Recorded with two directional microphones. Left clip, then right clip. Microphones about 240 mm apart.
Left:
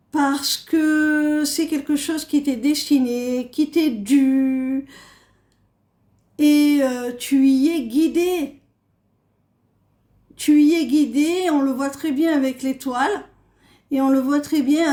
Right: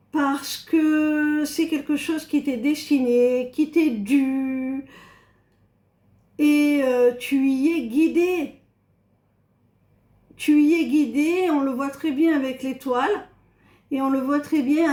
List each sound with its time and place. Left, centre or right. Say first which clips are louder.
0.1 s speech: left 4 dB; left
6.3 s a sound: left 3 dB; left
6.9 s speech: right 3 dB; left
10.3 s speech: left 2 dB; left